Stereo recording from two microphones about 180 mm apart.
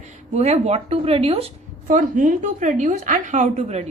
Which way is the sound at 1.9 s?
45° right (ahead or behind).